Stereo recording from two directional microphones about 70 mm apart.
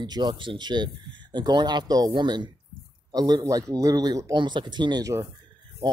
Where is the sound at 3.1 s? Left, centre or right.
Right.